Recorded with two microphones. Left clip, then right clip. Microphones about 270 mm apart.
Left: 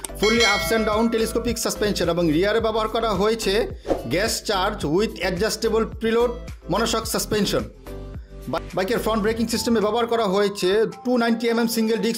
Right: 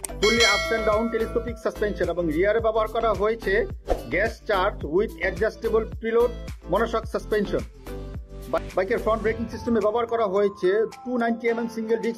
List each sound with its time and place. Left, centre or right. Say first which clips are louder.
0.2 s speech: left 1 dB; centre
0.9 s speech: left 2 dB; left
3.8 s music: left 3 dB; centre
4.1 s speech: even; left